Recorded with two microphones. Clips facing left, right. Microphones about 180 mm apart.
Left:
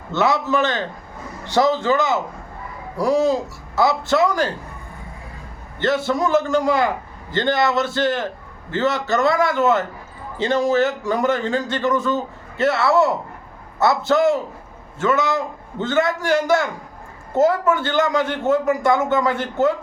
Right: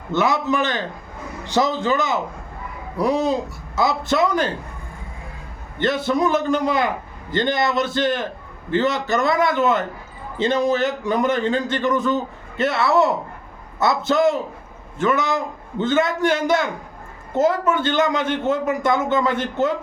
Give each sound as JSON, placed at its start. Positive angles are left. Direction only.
{"t": 0.1, "sound": "a man's voice", "side_deg": -15}
{"t": 5.8, "sound": "a man's voice", "side_deg": -20}